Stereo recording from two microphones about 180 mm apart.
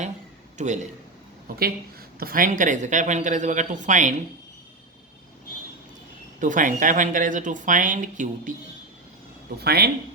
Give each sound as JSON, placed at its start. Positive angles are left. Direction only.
{"t": 0.6, "sound": "a man's voice", "side_deg": -40}
{"t": 2.1, "sound": "speech", "side_deg": -55}
{"t": 6.4, "sound": "speech", "side_deg": -45}
{"t": 9.6, "sound": "speech", "side_deg": -60}